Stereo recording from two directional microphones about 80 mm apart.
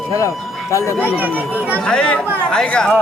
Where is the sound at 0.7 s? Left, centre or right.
Left.